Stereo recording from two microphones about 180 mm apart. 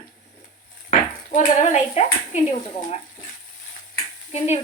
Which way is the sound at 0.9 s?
45° left (ahead or behind).